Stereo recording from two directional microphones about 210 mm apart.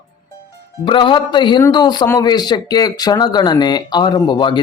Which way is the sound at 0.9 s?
25° left (ahead or behind).